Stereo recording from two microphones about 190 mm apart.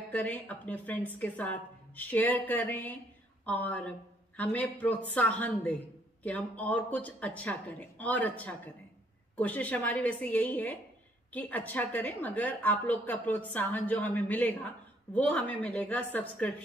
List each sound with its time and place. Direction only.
0.1 s a woman's voice: 10° left (ahead or behind)